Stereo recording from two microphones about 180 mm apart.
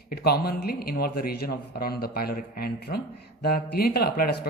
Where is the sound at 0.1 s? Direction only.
60° left (ahead or behind).